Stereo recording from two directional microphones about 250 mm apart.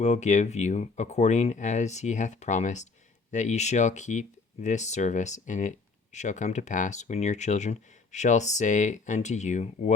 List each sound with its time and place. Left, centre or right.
0.0 s speech: left